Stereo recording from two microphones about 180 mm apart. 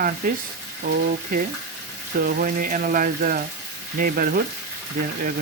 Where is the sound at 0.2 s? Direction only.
50° right (ahead or behind).